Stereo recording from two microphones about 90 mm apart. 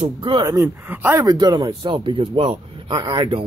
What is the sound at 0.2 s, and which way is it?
Speech, 60° right (ahead or behind).